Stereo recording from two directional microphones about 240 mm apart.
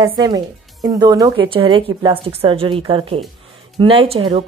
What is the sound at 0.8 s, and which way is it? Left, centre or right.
A woman's voice, centre.